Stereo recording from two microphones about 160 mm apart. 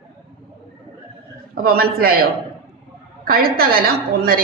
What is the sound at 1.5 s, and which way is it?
A woman's voice, 70° right (ahead or behind).